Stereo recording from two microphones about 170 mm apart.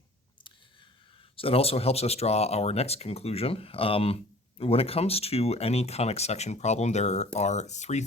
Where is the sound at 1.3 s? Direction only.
35° left (ahead or behind).